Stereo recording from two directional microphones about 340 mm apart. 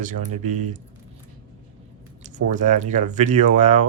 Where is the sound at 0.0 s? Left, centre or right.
Right.